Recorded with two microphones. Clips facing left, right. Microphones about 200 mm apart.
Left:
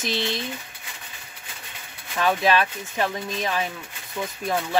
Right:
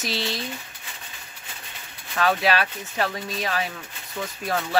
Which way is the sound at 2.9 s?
15° left (ahead or behind).